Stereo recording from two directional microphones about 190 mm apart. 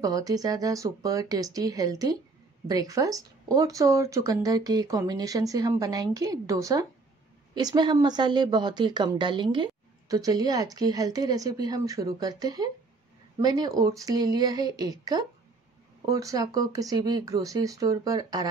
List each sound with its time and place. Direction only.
0.0 s a woman's voice: 20° right (ahead or behind)